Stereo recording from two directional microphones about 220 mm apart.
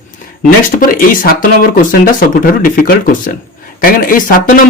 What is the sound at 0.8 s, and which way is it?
Speech, 40° left (ahead or behind).